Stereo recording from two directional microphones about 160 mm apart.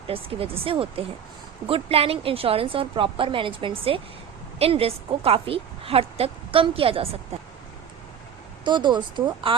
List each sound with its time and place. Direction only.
0.1 s a woman's voice: 35° right (ahead or behind)
8.6 s speech: 30° right (ahead or behind)